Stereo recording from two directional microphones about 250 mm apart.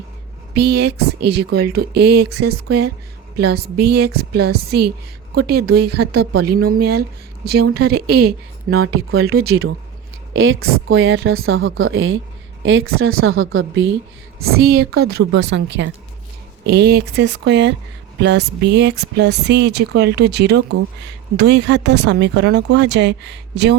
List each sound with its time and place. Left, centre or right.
0.5 s speech: right
9.1 s speech: right
14.4 s speech: right
14.9 s speech: right
15.4 s speech: right